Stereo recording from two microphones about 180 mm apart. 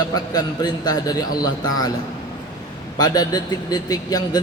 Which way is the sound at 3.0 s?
20° left (ahead or behind).